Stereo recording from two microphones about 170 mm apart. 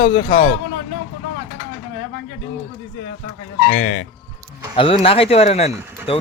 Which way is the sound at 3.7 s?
50° left (ahead or behind).